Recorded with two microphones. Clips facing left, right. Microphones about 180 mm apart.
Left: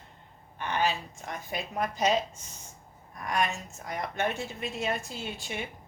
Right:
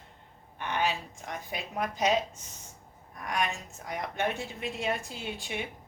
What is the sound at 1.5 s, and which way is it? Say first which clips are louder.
Speech: left 2 dB; 15° right (ahead or behind).